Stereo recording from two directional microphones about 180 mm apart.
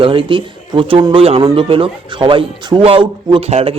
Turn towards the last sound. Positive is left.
turn(degrees=-35)  # may be behind; listen again after turning